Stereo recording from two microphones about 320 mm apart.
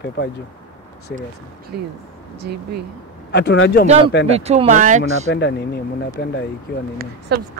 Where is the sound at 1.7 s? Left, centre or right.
Right.